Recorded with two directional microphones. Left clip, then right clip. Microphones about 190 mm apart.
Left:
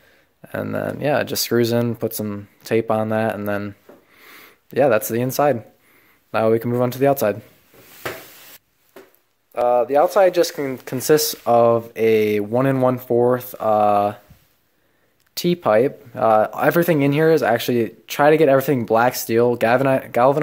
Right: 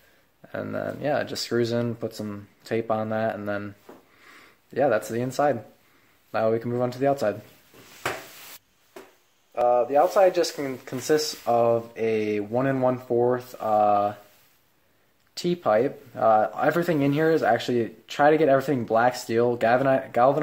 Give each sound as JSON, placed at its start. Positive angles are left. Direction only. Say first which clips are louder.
{"t": 0.4, "sound": "speech", "louder": "left 6 dB", "side_deg": 30}
{"t": 9.5, "sound": "speech", "louder": "left 4 dB", "side_deg": 40}
{"t": 15.3, "sound": "speech", "louder": "left 5 dB", "side_deg": 30}